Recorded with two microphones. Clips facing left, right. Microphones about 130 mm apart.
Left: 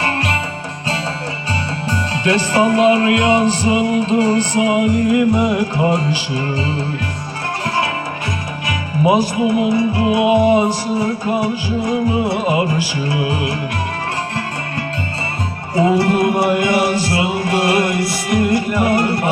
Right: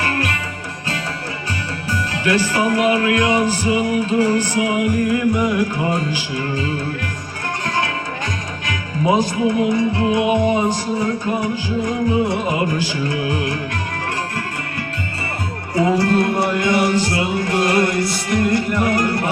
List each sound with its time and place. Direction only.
2.2 s music: 25° left (ahead or behind)
15.7 s music: 20° left (ahead or behind)